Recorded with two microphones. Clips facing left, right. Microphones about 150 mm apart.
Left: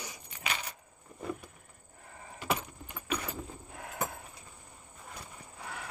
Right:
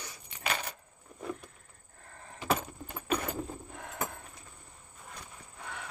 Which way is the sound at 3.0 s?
45° right (ahead or behind).